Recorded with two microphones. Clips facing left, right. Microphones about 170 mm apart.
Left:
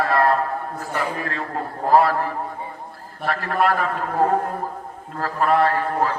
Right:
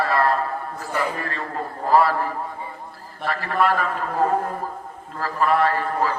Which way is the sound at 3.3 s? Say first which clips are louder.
Left 1 dB; 45° left (ahead or behind).